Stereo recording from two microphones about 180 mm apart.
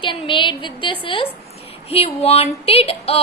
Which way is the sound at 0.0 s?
30° left (ahead or behind).